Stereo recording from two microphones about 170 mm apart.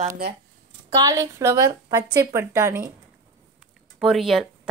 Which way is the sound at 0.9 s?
20° right (ahead or behind).